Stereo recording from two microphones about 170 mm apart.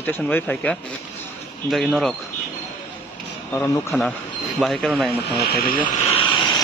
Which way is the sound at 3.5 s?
10° left (ahead or behind).